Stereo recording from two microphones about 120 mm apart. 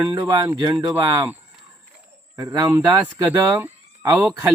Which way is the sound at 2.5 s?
35° right (ahead or behind).